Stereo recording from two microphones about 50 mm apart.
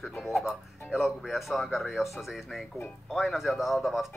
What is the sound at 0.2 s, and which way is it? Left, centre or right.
Speech, centre.